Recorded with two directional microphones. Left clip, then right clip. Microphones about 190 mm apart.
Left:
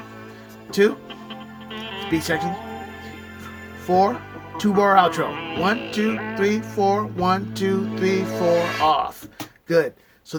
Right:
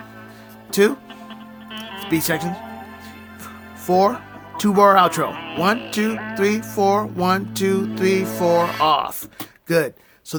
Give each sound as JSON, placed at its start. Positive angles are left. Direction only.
{"t": 0.7, "sound": "speech", "side_deg": -30}
{"t": 2.0, "sound": "speech", "side_deg": -30}
{"t": 3.8, "sound": "speech", "side_deg": -30}
{"t": 5.3, "sound": "music", "side_deg": 20}
{"t": 5.9, "sound": "music", "side_deg": -30}
{"t": 9.6, "sound": "speech", "side_deg": -35}